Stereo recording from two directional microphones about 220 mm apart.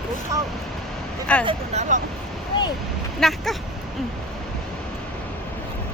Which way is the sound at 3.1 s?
Centre (ahead or behind).